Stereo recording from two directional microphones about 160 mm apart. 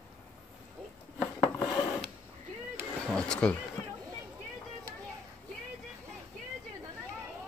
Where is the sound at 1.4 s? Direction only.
20° left (ahead or behind).